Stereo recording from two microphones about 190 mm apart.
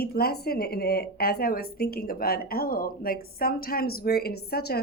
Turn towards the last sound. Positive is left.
turn(degrees=55)  # may be behind; listen again after turning